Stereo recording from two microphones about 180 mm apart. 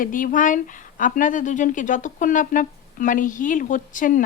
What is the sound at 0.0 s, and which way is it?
Speech, 50° left (ahead or behind).